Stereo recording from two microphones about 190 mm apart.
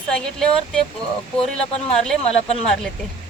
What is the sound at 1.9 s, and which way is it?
Speech, 5° left (ahead or behind).